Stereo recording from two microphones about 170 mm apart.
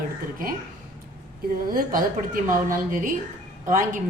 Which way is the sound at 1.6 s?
55° right (ahead or behind).